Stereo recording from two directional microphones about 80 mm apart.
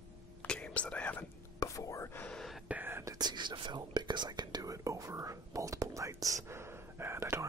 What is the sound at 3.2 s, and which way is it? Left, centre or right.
Whispering, right.